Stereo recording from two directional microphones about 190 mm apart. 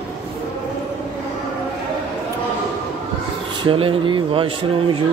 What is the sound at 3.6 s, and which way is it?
Speech, 30° right (ahead or behind).